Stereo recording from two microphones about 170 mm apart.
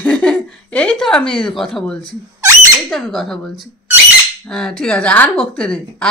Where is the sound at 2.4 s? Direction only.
20° right (ahead or behind).